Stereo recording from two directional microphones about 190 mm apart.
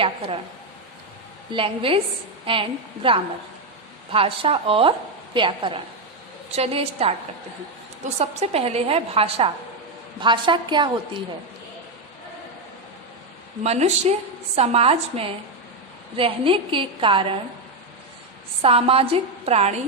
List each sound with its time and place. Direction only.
1.5 s a woman's voice: 30° right (ahead or behind)
8.2 s a woman's voice: 35° right (ahead or behind)
13.7 s a woman's voice: 35° right (ahead or behind)
18.6 s a woman's voice: 30° right (ahead or behind)